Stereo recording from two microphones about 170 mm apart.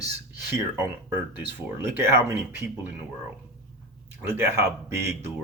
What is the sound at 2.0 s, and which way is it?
Speech, 15° right (ahead or behind).